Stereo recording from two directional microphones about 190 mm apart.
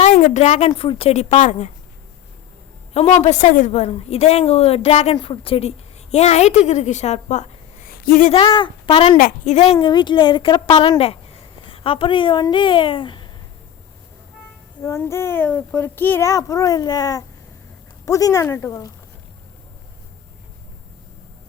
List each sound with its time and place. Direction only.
0.0 s a woman's voice: 40° left (ahead or behind)
2.9 s a woman's voice: 35° left (ahead or behind)
7.9 s a sound: 50° left (ahead or behind)
8.3 s speech: 25° left (ahead or behind)
9.1 s a woman's voice: 40° left (ahead or behind)
9.8 s speech: 25° left (ahead or behind)
14.8 s speech: 15° left (ahead or behind)